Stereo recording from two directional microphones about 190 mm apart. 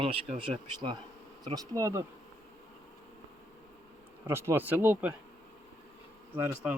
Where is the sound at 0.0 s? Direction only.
30° right (ahead or behind).